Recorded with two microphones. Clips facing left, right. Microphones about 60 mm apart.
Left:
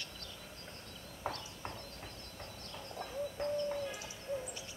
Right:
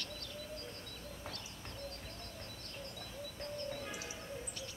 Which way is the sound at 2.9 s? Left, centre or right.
Left.